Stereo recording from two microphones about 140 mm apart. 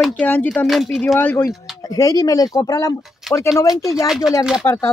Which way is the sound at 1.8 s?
25° left (ahead or behind).